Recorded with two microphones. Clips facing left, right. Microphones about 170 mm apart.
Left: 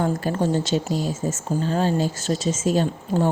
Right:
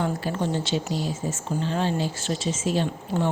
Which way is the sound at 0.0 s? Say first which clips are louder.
Left 4 dB; 40° left (ahead or behind).